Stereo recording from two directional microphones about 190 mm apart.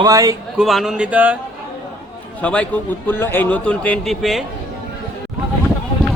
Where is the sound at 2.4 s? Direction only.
5° left (ahead or behind).